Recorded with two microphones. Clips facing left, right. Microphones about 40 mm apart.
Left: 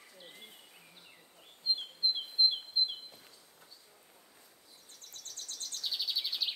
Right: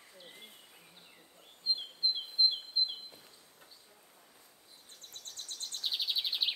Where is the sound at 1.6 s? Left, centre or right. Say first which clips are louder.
Left 1 dB; centre.